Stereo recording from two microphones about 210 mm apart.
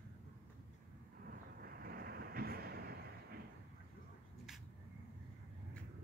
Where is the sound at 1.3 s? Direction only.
45° right (ahead or behind).